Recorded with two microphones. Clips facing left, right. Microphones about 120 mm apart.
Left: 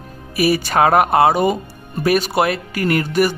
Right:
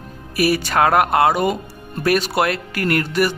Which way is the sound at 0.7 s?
25° left (ahead or behind).